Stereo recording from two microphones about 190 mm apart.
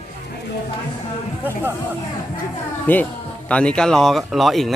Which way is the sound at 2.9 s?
10° left (ahead or behind).